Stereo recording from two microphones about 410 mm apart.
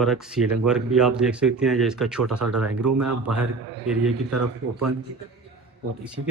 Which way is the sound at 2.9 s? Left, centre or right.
Right.